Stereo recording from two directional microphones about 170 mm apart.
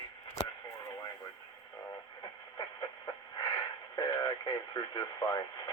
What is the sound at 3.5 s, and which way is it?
Speech, 20° left (ahead or behind).